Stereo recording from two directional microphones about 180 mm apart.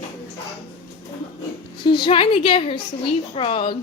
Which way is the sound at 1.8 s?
25° left (ahead or behind).